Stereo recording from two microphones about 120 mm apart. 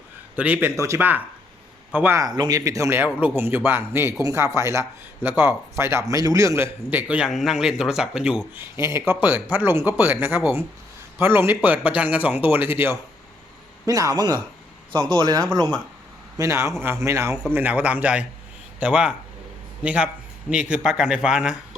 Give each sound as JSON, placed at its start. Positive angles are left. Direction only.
{"t": 0.3, "sound": "a man's voice", "side_deg": -15}
{"t": 2.1, "sound": "a man's voice", "side_deg": -35}
{"t": 6.9, "sound": "speech", "side_deg": -10}
{"t": 7.3, "sound": "speech", "side_deg": 0}
{"t": 8.5, "sound": "speech", "side_deg": -20}
{"t": 13.8, "sound": "a man's voice", "side_deg": -30}
{"t": 16.4, "sound": "a man's voice", "side_deg": -25}